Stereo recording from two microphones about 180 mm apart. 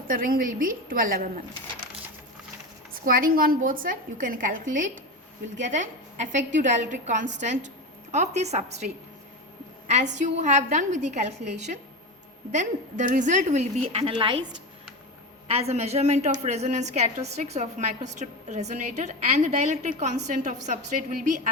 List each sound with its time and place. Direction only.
0.1 s a woman's voice: 50° right (ahead or behind)
2.9 s a woman's voice: 50° right (ahead or behind); by 8.9 s 35° right (ahead or behind)
9.8 s a sound: 40° right (ahead or behind)
10.2 s a woman's voice: 40° right (ahead or behind)
15.4 s a woman's voice: 35° right (ahead or behind)